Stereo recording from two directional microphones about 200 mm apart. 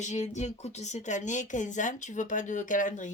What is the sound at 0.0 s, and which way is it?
Speech, 35° left (ahead or behind).